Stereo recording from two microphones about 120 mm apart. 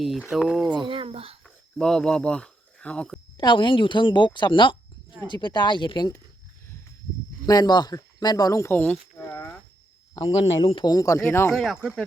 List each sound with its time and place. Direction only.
0.0 s speech: centre (ahead or behind)
0.9 s speech: 50° right (ahead or behind)
1.5 s cricket: 5° left (ahead or behind)
3.3 s speech: 40° left (ahead or behind)
7.4 s speech: 35° left (ahead or behind)
10.4 s speech: 55° left (ahead or behind)
10.8 s speech: 30° left (ahead or behind)
11.5 s speech: centre (ahead or behind)